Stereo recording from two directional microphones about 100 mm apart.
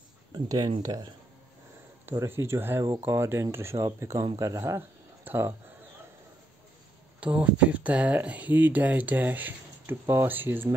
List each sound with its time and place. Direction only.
0.3 s speech: 45° right (ahead or behind)
2.1 s speech: 25° right (ahead or behind)
5.2 s a sound: 20° right (ahead or behind)
7.2 s speech: 15° right (ahead or behind)